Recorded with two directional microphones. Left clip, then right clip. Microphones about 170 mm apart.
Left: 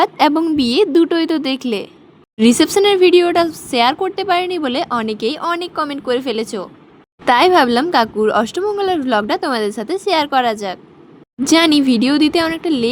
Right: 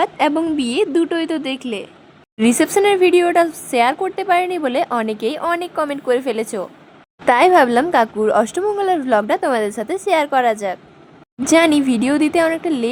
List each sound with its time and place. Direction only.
0.0 s speech: 35° left (ahead or behind)
2.4 s speech: 25° left (ahead or behind)